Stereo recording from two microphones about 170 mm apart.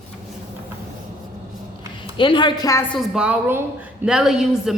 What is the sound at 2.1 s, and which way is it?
Speech, 30° left (ahead or behind).